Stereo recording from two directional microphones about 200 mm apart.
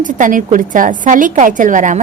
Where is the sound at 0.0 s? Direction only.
40° right (ahead or behind).